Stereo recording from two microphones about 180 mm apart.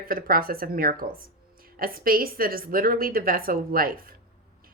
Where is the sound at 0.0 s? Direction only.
55° right (ahead or behind).